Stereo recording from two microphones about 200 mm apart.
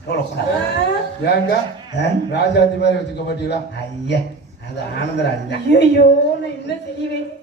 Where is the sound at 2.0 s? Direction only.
55° left (ahead or behind).